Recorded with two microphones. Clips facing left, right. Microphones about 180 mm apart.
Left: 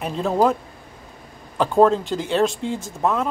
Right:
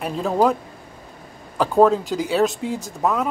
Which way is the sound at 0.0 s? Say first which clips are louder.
Even; centre (ahead or behind).